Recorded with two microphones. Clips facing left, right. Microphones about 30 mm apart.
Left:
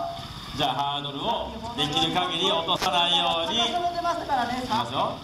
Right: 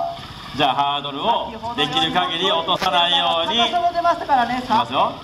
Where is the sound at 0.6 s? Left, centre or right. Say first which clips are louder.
Right 8 dB; right.